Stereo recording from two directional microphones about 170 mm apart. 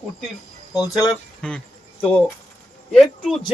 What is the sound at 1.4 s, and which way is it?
Speech, 5° left (ahead or behind).